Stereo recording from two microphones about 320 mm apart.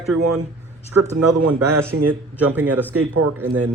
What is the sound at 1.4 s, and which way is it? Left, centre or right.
Speech, right.